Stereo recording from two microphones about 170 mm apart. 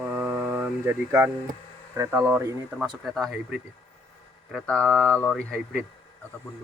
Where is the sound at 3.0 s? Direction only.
Centre (ahead or behind).